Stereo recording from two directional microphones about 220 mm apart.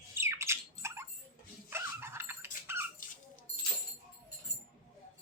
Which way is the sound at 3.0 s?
40° left (ahead or behind).